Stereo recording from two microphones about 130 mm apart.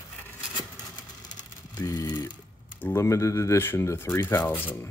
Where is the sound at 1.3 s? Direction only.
30° left (ahead or behind).